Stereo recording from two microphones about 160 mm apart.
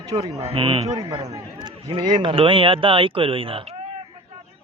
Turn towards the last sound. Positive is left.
turn(degrees=-35)  # may be behind; listen again after turning